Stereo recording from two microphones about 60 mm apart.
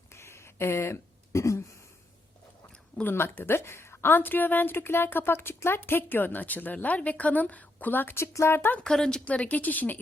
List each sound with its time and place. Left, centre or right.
0.1 s a sound: left
3.0 s a woman's voice: left
8.1 s speech: left
8.8 s a woman's voice: centre
9.2 s speech: left